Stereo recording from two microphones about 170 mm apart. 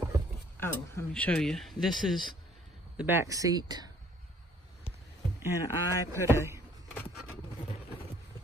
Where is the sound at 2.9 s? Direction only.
10° right (ahead or behind).